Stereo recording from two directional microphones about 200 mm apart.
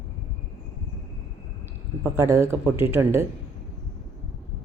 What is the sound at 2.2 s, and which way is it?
A woman's voice, 15° right (ahead or behind).